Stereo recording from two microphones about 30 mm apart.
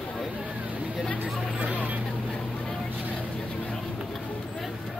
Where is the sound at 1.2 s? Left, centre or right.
Right.